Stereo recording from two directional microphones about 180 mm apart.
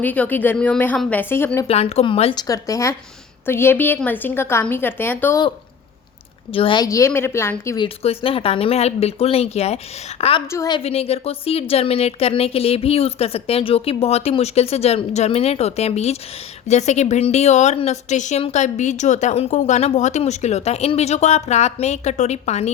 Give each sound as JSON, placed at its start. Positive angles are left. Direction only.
{"t": 0.0, "sound": "a woman's voice", "side_deg": 10}
{"t": 1.6, "sound": "a woman's voice", "side_deg": 35}
{"t": 2.5, "sound": "a woman's voice", "side_deg": 20}
{"t": 6.5, "sound": "a woman's voice", "side_deg": 30}
{"t": 8.0, "sound": "a woman's voice", "side_deg": 30}
{"t": 10.5, "sound": "speech", "side_deg": 20}
{"t": 10.8, "sound": "a woman's voice", "side_deg": 35}